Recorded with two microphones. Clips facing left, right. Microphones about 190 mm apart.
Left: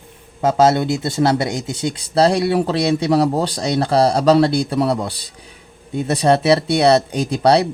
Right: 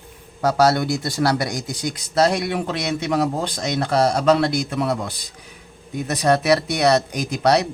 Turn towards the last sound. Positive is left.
turn(degrees=30)  # may be behind; listen again after turning